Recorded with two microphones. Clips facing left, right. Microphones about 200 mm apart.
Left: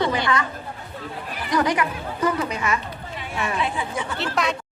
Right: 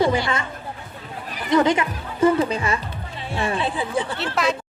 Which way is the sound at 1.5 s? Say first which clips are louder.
Right 4 dB; 25° right (ahead or behind).